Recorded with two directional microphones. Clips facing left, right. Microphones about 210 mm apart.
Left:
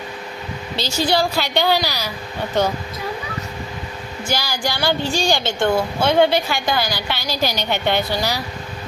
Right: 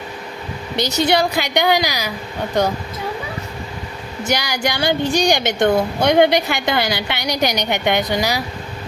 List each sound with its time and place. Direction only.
0.8 s a woman's voice: 20° right (ahead or behind)
4.2 s speech: 20° right (ahead or behind)